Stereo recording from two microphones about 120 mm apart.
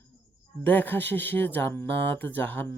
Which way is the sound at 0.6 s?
15° left (ahead or behind).